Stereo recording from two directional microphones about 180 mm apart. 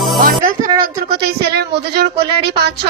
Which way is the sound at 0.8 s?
60° right (ahead or behind).